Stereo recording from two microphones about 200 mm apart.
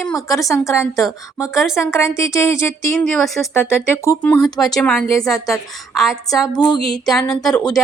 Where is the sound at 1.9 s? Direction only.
15° left (ahead or behind).